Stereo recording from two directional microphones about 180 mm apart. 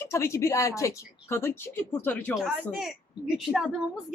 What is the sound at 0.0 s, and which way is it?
Speech, 15° left (ahead or behind).